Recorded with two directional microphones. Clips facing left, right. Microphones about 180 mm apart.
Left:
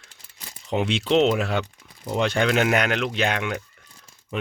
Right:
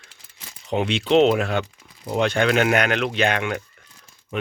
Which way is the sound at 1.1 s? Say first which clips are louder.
Right 3 dB; 50° right (ahead or behind).